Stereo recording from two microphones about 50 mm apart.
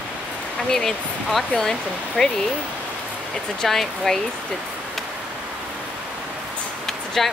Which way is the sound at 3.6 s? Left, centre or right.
Centre.